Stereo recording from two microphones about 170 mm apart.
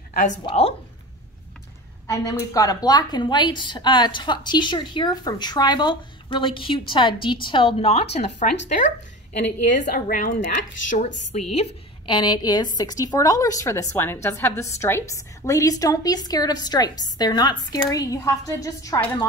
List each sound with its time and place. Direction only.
0.5 s a woman's voice: 35° left (ahead or behind)
2.0 s a woman's voice: 20° left (ahead or behind); by 11.4 s 45° left (ahead or behind)
12.1 s a woman's voice: 25° left (ahead or behind)